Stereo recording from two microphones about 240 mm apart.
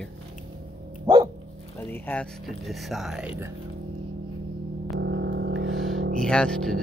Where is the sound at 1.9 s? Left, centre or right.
Centre.